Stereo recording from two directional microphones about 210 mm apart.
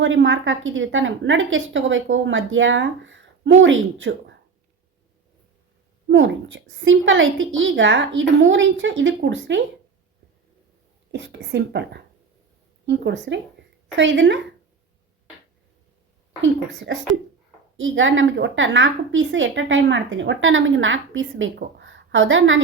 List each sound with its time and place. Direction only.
0.0 s a woman's voice: 60° right (ahead or behind)
6.1 s a woman's voice: 65° right (ahead or behind)
11.1 s a woman's voice: 55° right (ahead or behind)
16.4 s a woman's voice: 60° right (ahead or behind)